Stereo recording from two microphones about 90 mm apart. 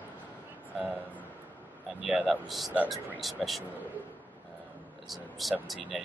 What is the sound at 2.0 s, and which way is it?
Speech, 5° right (ahead or behind).